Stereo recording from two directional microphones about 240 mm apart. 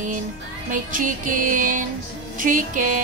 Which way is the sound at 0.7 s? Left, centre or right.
Right.